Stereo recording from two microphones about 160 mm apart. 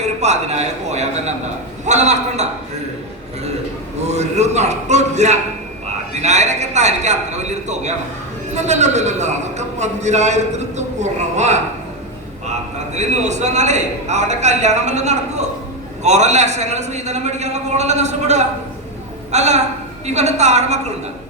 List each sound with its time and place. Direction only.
0.2 s a man's voice: 45° right (ahead or behind)
4.1 s a man's voice: 45° right (ahead or behind)